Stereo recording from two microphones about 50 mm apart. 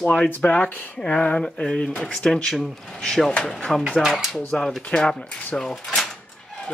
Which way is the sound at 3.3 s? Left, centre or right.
Centre.